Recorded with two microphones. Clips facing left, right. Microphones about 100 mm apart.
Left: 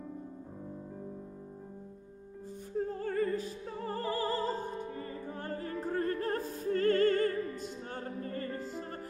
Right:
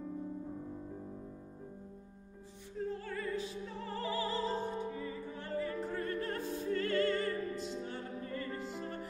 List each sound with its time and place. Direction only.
2.8 s opera: 45° left (ahead or behind)
8.7 s music: 40° left (ahead or behind)